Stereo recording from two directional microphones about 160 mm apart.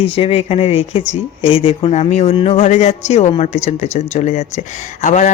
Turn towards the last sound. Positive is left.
turn(degrees=50)  # may be behind; listen again after turning